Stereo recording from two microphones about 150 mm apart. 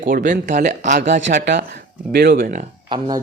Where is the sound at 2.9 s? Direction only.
30° right (ahead or behind).